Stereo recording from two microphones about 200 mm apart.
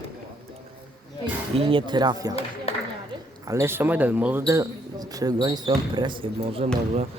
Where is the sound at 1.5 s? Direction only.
25° right (ahead or behind).